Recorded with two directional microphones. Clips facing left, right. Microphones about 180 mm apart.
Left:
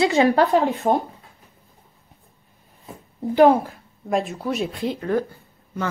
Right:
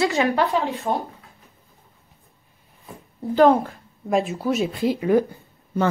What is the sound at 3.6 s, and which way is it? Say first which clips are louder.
Speech: right 1 dB; centre (ahead or behind).